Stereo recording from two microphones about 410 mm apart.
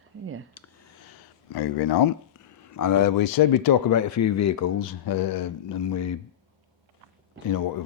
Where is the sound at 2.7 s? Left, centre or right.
Left.